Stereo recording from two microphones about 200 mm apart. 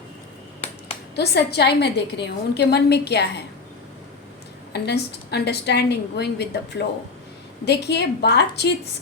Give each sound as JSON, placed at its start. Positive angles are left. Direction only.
{"t": 1.1, "sound": "a woman's voice", "side_deg": 55}
{"t": 4.7, "sound": "a woman's voice", "side_deg": 55}